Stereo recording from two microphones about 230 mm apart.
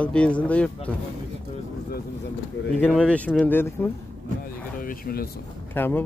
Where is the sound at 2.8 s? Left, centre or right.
Centre.